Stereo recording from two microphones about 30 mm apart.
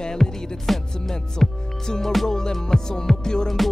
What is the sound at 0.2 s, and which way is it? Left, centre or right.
Music, centre.